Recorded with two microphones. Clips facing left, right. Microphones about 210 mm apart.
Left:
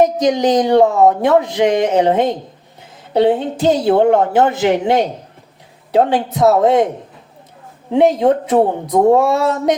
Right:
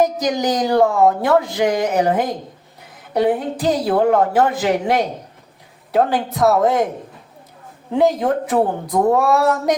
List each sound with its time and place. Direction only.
0.0 s speech: 25° left (ahead or behind)
7.9 s speech: 25° left (ahead or behind)